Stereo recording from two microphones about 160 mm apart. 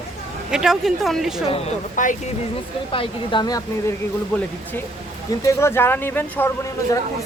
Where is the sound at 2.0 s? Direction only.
55° left (ahead or behind).